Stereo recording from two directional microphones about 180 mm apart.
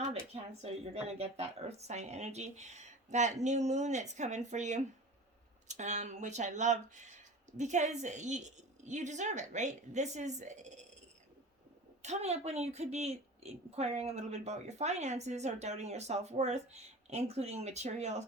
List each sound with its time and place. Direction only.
0.0 s a woman's voice: 35° right (ahead or behind)
12.0 s a woman's voice: 40° right (ahead or behind)